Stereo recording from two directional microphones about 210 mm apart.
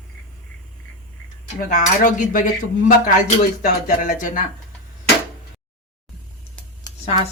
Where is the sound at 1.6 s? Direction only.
40° left (ahead or behind).